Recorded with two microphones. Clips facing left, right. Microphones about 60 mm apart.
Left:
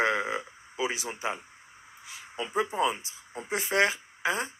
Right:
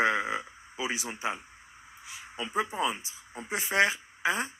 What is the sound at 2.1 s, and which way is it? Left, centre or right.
A woman's voice, right.